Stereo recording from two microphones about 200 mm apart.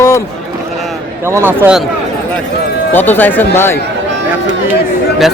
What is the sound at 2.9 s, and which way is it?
Speech, 10° left (ahead or behind).